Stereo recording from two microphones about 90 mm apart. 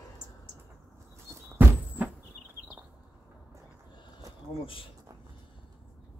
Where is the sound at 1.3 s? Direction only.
30° right (ahead or behind).